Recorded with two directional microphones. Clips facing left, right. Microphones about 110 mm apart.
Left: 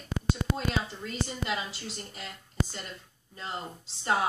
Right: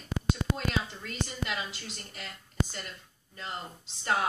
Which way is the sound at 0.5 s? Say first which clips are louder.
Left 1 dB; 25° left (ahead or behind).